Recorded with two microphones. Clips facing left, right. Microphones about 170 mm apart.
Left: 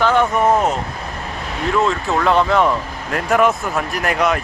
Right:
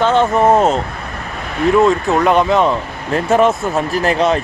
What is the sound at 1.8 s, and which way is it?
Speech, 15° right (ahead or behind).